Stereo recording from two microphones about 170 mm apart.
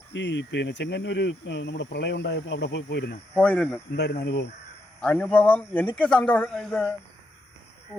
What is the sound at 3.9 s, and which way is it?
Speech, 80° left.